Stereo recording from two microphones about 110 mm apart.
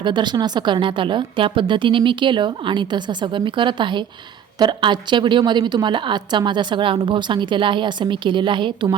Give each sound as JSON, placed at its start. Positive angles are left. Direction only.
{"t": 0.0, "sound": "a woman's voice", "side_deg": -45}